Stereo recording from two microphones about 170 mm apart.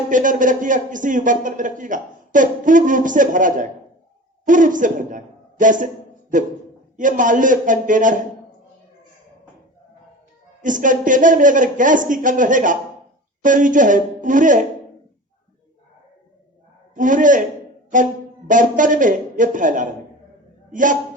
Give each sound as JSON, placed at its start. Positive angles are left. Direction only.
{"t": 0.1, "sound": "a man's voice", "side_deg": -50}
{"t": 10.6, "sound": "a man's voice", "side_deg": -50}
{"t": 16.9, "sound": "a man's voice", "side_deg": -50}